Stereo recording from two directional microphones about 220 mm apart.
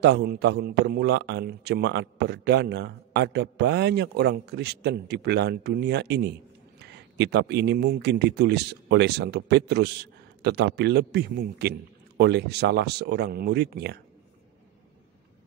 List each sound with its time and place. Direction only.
0.0 s a man's voice: 50° right (ahead or behind)